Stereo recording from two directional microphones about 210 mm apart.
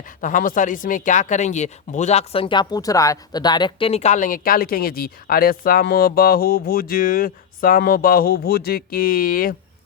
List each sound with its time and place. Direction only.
0.2 s speech: 40° left (ahead or behind)